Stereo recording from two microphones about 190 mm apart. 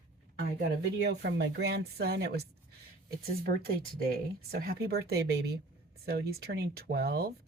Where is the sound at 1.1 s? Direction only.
60° right (ahead or behind).